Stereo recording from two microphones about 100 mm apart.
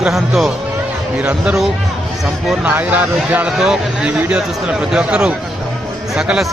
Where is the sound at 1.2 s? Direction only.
10° right (ahead or behind).